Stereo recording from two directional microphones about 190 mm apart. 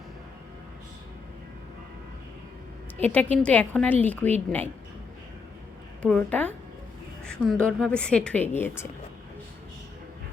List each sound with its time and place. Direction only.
3.0 s a woman's voice: 10° left (ahead or behind)
6.0 s a woman's voice: 5° left (ahead or behind)